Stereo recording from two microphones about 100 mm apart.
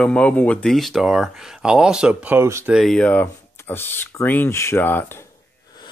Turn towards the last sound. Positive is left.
turn(degrees=20)  # may be behind; listen again after turning